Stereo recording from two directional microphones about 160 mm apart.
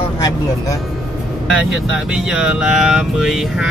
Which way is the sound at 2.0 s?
5° right (ahead or behind).